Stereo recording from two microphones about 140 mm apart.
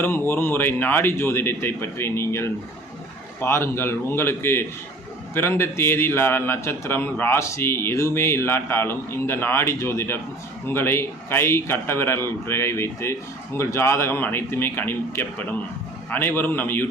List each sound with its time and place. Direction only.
0.0 s a man's voice: 15° left (ahead or behind)